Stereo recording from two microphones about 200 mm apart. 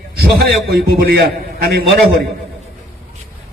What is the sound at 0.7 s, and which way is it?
A man's voice, 55° right (ahead or behind).